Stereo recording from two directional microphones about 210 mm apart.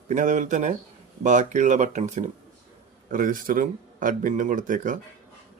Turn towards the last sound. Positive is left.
turn(degrees=-40)  # may be behind; listen again after turning